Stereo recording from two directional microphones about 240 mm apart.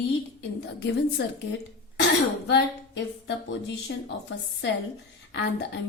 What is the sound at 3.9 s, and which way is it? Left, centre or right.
Speech, left.